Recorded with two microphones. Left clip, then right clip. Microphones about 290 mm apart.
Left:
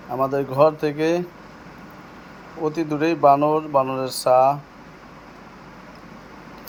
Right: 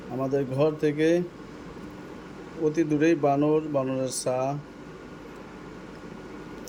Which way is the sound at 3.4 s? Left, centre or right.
Left.